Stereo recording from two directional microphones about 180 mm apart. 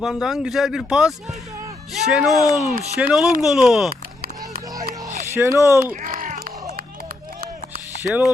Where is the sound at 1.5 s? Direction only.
20° right (ahead or behind).